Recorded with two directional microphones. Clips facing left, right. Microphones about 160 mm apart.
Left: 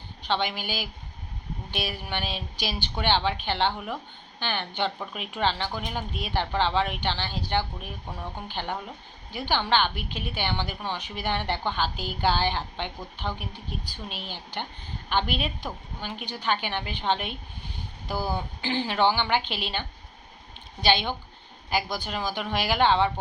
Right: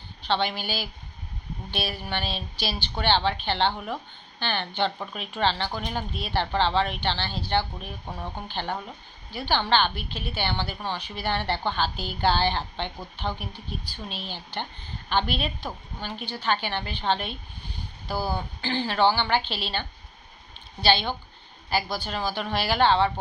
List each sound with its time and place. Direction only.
0.3 s a woman's voice: 15° left (ahead or behind)
8.0 s speech: 15° right (ahead or behind)
8.4 s a woman's voice: 15° left (ahead or behind)
18.3 s a woman's voice: 15° left (ahead or behind)
20.8 s a woman's voice: 15° left (ahead or behind)